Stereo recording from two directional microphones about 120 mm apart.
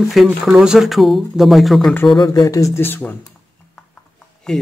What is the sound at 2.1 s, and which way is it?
Speech, 35° left (ahead or behind).